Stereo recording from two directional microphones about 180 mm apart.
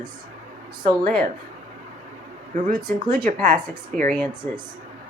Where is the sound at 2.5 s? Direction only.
45° right (ahead or behind).